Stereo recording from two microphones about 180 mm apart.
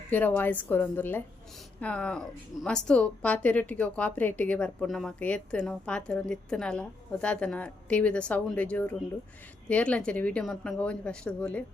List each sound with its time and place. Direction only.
0.1 s speech: 10° left (ahead or behind)